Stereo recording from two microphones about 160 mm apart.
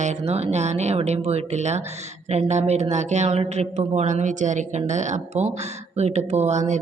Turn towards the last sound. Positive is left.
turn(degrees=-45)  # may be behind; listen again after turning